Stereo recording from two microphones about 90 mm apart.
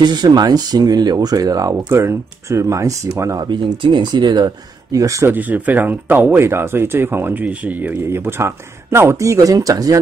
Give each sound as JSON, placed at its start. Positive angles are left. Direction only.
{"t": 0.0, "sound": "speech", "side_deg": -50}
{"t": 3.3, "sound": "speech", "side_deg": -60}
{"t": 4.9, "sound": "speech", "side_deg": -35}
{"t": 5.3, "sound": "speech", "side_deg": -20}